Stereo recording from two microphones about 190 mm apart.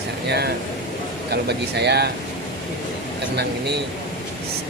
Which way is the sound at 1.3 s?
60° right (ahead or behind).